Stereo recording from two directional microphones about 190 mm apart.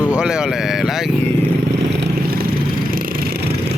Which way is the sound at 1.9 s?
50° right (ahead or behind).